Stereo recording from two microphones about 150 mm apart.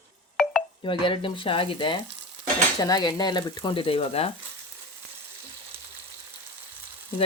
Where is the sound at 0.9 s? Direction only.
35° left (ahead or behind).